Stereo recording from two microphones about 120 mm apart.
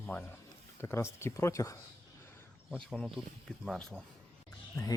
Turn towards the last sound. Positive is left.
turn(degrees=25)  # may be behind; listen again after turning